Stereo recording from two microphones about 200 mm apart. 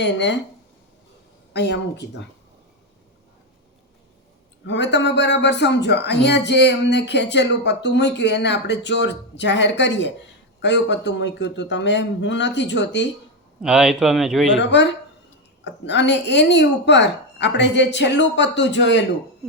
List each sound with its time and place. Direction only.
0.0 s speech: 60° left (ahead or behind)
1.5 s speech: 60° left (ahead or behind)
4.6 s speech: 65° left (ahead or behind)
13.6 s speech: 5° right (ahead or behind)
14.5 s speech: 65° left (ahead or behind)